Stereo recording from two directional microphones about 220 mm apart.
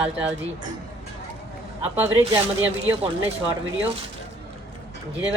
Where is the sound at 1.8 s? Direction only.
10° right (ahead or behind).